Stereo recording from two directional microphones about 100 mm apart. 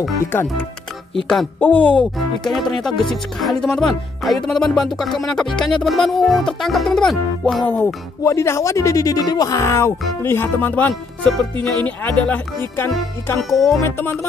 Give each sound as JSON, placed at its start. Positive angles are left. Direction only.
{"t": 0.2, "sound": "music", "side_deg": 20}
{"t": 1.1, "sound": "speech", "side_deg": 0}
{"t": 1.6, "sound": "speech", "side_deg": 15}
{"t": 2.1, "sound": "speech", "side_deg": 5}
{"t": 8.2, "sound": "speech", "side_deg": 30}
{"t": 13.4, "sound": "speech", "side_deg": 0}
{"t": 13.7, "sound": "music", "side_deg": 25}